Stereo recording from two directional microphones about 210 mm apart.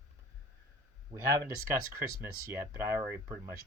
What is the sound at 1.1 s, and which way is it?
Speech, 15° right (ahead or behind).